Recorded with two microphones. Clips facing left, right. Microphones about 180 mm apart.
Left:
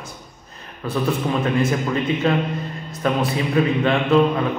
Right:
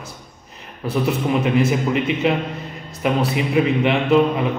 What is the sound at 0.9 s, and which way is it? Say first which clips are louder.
A man's voice: right 2 dB; 15° right (ahead or behind).